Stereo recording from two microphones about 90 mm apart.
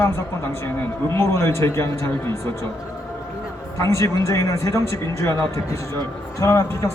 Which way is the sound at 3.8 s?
35° left (ahead or behind).